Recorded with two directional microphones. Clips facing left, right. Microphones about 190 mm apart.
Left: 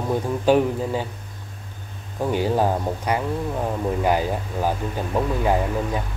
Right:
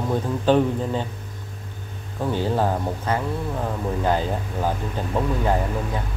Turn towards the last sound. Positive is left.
turn(degrees=10)  # may be behind; listen again after turning